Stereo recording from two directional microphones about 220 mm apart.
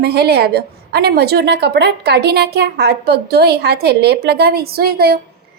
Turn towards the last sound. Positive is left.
turn(degrees=-45)  # may be behind; listen again after turning